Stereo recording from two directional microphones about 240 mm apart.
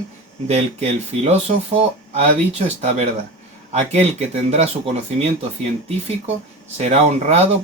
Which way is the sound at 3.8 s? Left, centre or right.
Right.